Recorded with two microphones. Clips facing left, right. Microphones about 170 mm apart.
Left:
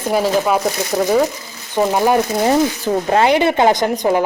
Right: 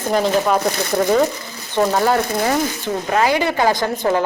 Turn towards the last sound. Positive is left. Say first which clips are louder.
# left 3 dB
turn(degrees=15)  # may be behind; listen again after turning